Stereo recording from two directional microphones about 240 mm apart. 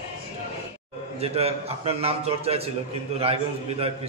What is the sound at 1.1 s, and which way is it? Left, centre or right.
A man's voice, right.